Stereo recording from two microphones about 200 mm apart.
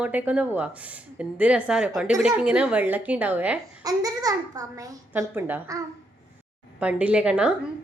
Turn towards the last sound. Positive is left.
turn(degrees=-5)  # may be behind; listen again after turning